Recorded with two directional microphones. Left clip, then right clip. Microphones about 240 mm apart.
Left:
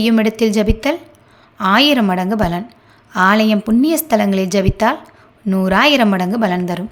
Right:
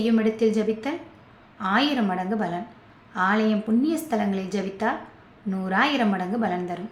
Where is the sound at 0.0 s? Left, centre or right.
Left.